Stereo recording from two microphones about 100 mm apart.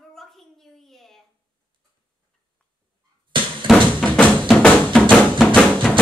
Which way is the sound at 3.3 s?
55° right (ahead or behind).